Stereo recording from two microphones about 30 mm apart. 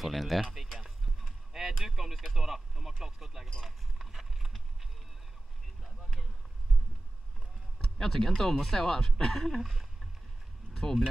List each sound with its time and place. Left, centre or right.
0.0 s speech: centre
0.7 s vehicle: centre
1.9 s speech: centre
3.6 s boat: centre
8.0 s speech: centre
9.6 s speech: centre
10.7 s a sound: centre